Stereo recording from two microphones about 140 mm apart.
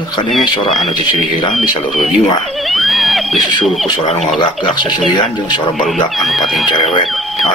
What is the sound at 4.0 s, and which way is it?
Speech, 50° left (ahead or behind).